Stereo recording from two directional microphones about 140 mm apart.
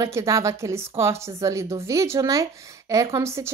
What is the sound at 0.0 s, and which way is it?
A woman's voice, 20° right (ahead or behind).